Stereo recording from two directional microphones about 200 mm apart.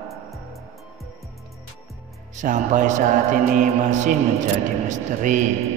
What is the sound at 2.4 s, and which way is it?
Speech, 35° right (ahead or behind).